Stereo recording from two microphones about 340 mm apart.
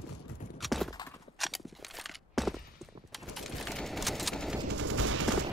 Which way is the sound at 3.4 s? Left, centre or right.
Centre.